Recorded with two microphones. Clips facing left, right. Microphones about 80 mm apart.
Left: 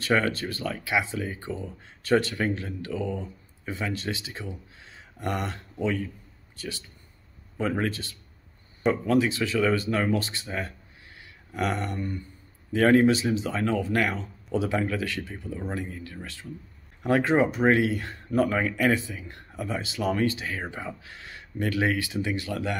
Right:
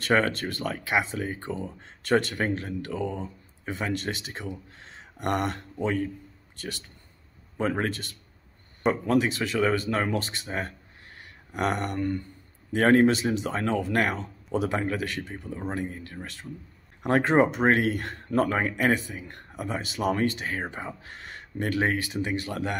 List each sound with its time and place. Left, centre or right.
0.0 s speech: right
5.8 s speech: right
7.6 s speech: right
12.7 s speech: right
20.6 s speech: right